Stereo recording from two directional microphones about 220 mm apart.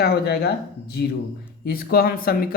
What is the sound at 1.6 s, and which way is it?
Speech, 45° left (ahead or behind).